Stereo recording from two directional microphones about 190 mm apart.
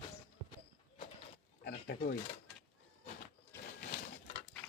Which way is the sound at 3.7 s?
45° left (ahead or behind).